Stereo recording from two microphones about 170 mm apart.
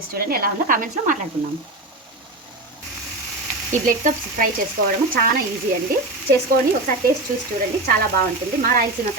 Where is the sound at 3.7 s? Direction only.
50° right (ahead or behind).